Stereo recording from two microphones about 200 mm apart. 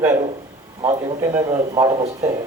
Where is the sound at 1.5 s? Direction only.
20° right (ahead or behind).